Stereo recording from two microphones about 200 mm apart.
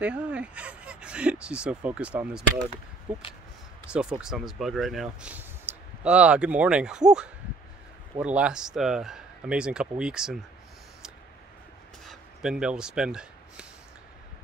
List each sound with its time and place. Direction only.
0.0 s speech: 5° right (ahead or behind)
3.9 s speech: 5° right (ahead or behind)
12.0 s a sound: centre (ahead or behind)